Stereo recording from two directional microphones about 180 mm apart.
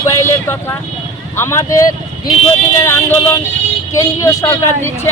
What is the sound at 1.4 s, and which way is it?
Speech, 15° left (ahead or behind).